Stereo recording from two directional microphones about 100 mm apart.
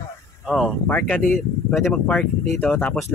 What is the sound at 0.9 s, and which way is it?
Speech, 15° left (ahead or behind).